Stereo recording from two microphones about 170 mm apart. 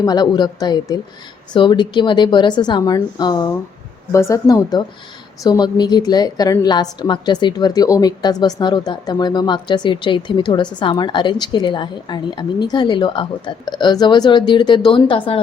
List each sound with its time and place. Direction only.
0.0 s a woman's voice: 25° left (ahead or behind)